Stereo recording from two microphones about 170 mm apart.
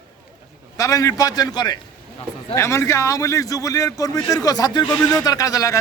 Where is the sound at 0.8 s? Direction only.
20° left (ahead or behind).